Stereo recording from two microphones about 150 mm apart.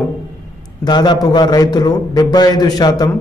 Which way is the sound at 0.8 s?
30° left (ahead or behind).